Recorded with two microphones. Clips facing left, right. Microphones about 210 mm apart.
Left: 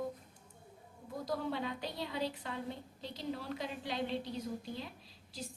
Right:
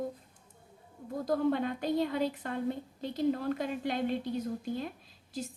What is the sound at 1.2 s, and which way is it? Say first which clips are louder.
A woman's voice: right 8 dB; 50° right (ahead or behind).